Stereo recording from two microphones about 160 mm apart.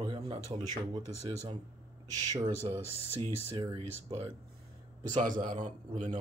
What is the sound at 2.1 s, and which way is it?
Speech, 25° right (ahead or behind).